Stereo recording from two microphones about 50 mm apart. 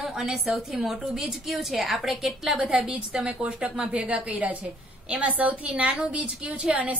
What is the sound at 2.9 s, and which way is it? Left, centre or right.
A woman's voice, right.